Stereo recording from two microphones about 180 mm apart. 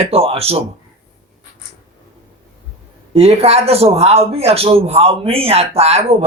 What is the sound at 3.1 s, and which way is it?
A man's voice, 35° right (ahead or behind).